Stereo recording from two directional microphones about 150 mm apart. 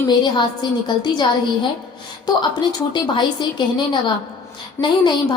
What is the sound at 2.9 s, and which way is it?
A woman's voice, 30° left (ahead or behind).